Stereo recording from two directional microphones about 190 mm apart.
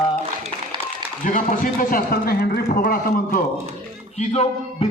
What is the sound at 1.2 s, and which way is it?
A man's voice, 40° left (ahead or behind).